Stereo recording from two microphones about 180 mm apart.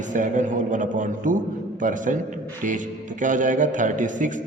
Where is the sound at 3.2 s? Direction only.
45° right (ahead or behind).